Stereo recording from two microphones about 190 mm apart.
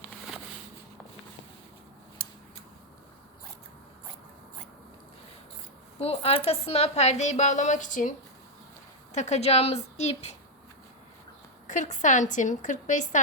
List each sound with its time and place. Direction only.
6.0 s a woman's voice: 30° left (ahead or behind)
9.1 s a woman's voice: 35° left (ahead or behind)
11.7 s a woman's voice: 40° left (ahead or behind)